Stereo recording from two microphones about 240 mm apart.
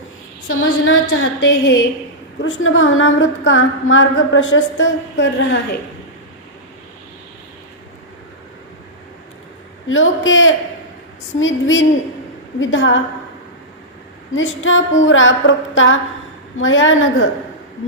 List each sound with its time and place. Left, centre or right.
0.4 s a woman's voice: left
9.9 s a woman's voice: left
14.3 s a woman's voice: left